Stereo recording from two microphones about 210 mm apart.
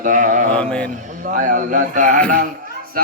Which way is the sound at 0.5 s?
5° left (ahead or behind).